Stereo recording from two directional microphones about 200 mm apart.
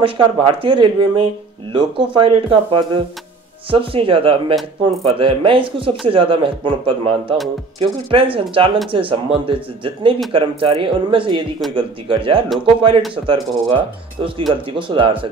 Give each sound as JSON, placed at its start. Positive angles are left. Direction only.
{"t": 0.0, "sound": "speech", "side_deg": -25}